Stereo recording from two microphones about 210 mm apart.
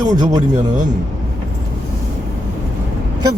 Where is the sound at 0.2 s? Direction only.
15° right (ahead or behind).